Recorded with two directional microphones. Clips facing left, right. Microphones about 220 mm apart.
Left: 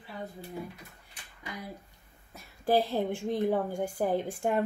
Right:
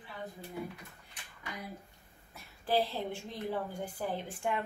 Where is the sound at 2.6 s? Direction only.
50° left (ahead or behind).